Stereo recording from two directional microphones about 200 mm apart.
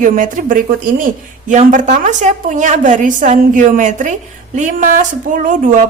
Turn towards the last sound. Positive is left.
turn(degrees=-40)  # may be behind; listen again after turning